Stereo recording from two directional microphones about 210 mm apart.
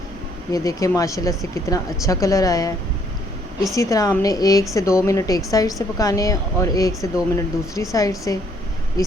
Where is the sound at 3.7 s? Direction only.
15° left (ahead or behind).